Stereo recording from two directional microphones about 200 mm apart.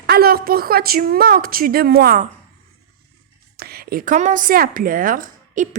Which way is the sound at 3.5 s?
50° right (ahead or behind).